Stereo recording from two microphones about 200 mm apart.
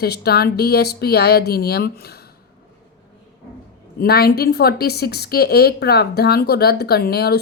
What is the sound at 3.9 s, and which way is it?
Speech, 50° left (ahead or behind).